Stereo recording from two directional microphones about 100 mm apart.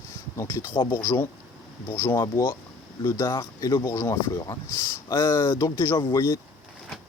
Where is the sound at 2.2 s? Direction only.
40° left (ahead or behind).